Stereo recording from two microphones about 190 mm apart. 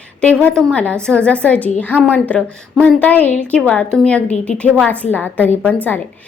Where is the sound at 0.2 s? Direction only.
5° left (ahead or behind).